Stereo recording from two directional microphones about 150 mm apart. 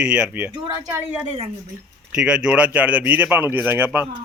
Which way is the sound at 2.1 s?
5° right (ahead or behind).